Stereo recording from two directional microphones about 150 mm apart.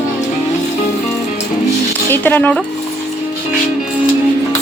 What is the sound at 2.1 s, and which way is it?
Speech, 15° left (ahead or behind).